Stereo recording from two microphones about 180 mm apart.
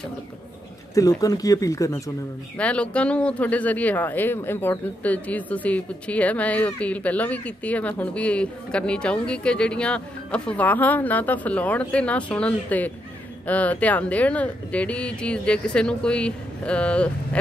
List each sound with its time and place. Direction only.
0.9 s speech: 20° left (ahead or behind)
2.5 s speech: 5° left (ahead or behind)